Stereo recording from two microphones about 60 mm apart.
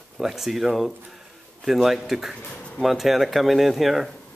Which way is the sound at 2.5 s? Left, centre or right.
Centre.